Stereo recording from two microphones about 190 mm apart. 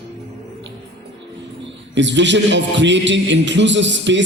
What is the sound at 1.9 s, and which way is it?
A man's voice, 70° right (ahead or behind).